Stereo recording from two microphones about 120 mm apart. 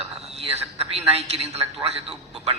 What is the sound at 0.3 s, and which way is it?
A man's voice, 60° right (ahead or behind).